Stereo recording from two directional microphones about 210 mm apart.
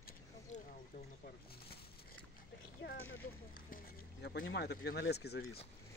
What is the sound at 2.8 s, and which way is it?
Speech, 50° left (ahead or behind).